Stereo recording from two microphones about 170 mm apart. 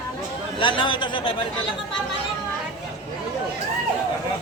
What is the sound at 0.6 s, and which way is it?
Speech, 30° left (ahead or behind).